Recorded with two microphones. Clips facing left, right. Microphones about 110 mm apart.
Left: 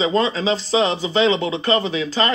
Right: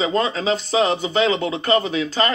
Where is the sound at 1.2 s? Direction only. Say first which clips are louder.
Left 4 dB; 30° left (ahead or behind).